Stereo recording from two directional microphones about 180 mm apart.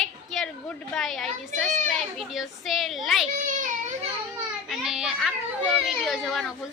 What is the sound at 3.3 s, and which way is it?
Baby cry, 45° right (ahead or behind).